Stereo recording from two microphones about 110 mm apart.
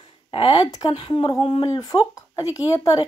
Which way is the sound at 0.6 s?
35° left (ahead or behind).